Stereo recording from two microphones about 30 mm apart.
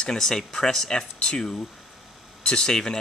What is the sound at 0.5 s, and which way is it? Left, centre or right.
Speech, left.